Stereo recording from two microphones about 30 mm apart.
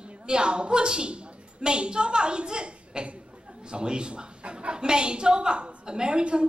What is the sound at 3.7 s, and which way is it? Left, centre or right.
A woman's voice, right.